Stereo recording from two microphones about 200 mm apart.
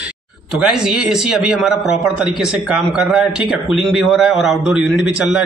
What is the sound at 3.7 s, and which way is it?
A man's voice, centre (ahead or behind).